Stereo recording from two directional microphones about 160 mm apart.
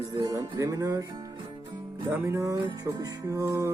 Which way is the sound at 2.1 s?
15° right (ahead or behind).